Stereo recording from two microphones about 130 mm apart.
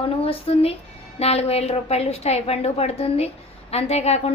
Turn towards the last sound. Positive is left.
turn(degrees=55)  # may be behind; listen again after turning